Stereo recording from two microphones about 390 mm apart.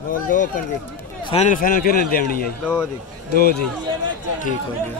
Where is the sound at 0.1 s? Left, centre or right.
Left.